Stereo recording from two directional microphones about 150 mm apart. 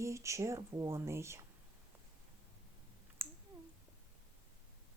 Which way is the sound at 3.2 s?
15° right (ahead or behind).